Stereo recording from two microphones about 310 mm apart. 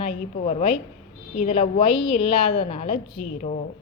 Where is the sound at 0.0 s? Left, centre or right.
Centre.